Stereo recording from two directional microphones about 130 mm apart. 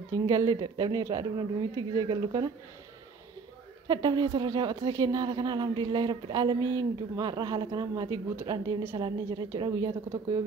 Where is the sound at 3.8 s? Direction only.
35° right (ahead or behind).